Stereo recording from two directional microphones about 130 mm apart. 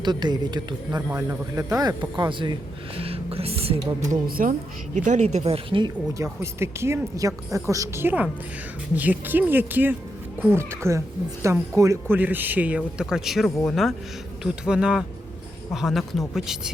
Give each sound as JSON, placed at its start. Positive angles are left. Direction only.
{"t": 0.0, "sound": "speech", "side_deg": -35}
{"t": 2.0, "sound": "speech", "side_deg": -35}
{"t": 3.0, "sound": "speech", "side_deg": -45}
{"t": 4.1, "sound": "speech", "side_deg": -90}
{"t": 4.9, "sound": "speech", "side_deg": -65}
{"t": 6.1, "sound": "a man's voice", "side_deg": -20}